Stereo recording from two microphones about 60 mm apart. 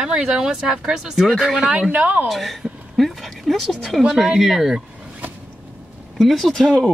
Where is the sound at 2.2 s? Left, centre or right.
Centre.